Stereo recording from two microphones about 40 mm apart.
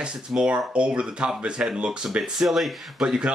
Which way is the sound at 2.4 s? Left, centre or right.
Centre.